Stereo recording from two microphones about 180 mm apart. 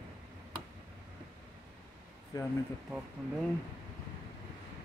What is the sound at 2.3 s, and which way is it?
Speech, 20° left (ahead or behind).